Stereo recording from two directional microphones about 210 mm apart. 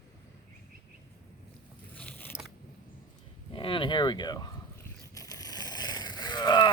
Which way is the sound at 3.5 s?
25° left (ahead or behind).